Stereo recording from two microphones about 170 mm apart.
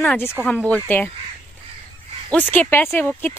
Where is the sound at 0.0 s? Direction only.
10° left (ahead or behind).